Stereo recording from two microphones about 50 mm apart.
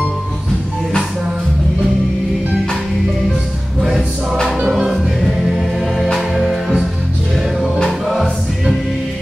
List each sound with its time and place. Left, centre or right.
4.5 s choir: centre
6.1 s music: centre
8.0 s choir: centre